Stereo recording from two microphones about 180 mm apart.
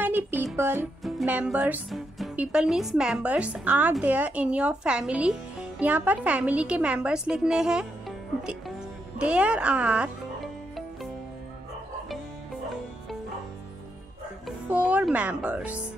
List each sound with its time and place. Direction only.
0.0 s music: 10° right (ahead or behind)
1.0 s speech: 5° right (ahead or behind)
9.2 s speech: 5° right (ahead or behind)
14.7 s speech: 10° right (ahead or behind)